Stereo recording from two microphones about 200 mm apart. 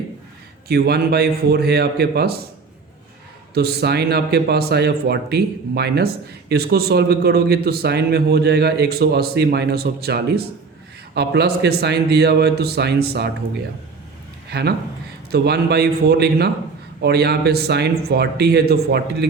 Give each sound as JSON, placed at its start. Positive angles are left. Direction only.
{"t": 0.7, "sound": "a man's voice", "side_deg": -50}
{"t": 3.5, "sound": "a man's voice", "side_deg": -50}
{"t": 14.5, "sound": "a man's voice", "side_deg": -50}